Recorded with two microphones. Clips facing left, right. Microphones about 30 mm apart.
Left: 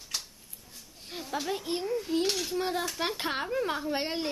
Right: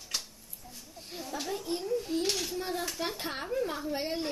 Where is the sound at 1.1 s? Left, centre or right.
Left.